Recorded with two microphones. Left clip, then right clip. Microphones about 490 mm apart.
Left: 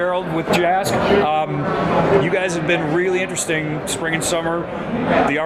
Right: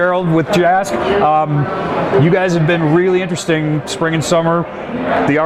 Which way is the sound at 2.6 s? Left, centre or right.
Right.